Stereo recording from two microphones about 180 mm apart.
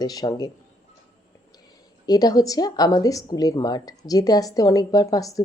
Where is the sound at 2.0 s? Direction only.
20° left (ahead or behind).